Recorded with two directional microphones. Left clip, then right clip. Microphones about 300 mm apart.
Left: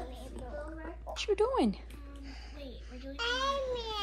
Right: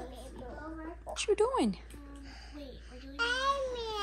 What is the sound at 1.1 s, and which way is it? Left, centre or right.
Speech, centre.